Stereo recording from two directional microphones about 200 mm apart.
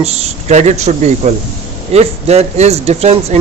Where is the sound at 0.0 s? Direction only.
30° right (ahead or behind).